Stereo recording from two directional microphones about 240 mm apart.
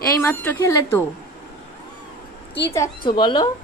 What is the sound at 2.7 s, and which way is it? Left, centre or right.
Speech, centre.